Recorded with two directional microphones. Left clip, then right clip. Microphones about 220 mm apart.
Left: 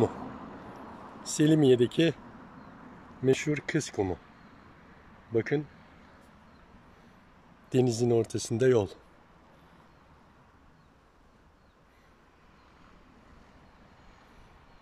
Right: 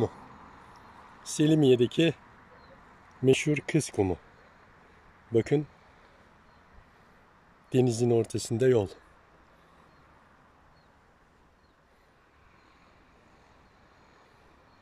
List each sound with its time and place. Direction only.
0.2 s vehicle: 45° left (ahead or behind)
1.2 s speech: centre (ahead or behind)
3.3 s speech: 5° right (ahead or behind)
5.3 s speech: 10° right (ahead or behind)
7.7 s speech: centre (ahead or behind)